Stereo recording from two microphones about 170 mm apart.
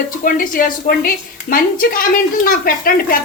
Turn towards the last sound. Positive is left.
turn(degrees=60)  # may be behind; listen again after turning